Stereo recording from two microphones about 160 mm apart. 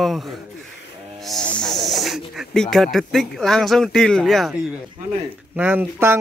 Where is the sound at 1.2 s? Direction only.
5° left (ahead or behind).